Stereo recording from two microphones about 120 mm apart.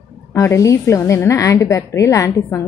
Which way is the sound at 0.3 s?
25° left (ahead or behind).